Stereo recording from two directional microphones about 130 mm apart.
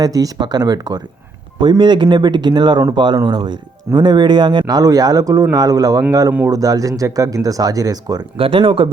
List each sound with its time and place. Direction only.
0.0 s speech: 30° right (ahead or behind)
8.4 s speech: 45° right (ahead or behind)